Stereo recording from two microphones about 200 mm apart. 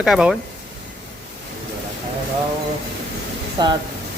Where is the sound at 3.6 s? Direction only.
20° right (ahead or behind).